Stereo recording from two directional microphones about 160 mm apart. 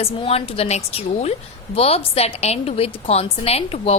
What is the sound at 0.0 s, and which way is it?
A woman's voice, 40° left (ahead or behind).